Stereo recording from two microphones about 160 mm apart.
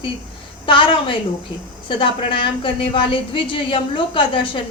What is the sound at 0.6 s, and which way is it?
A woman's voice, 30° left (ahead or behind).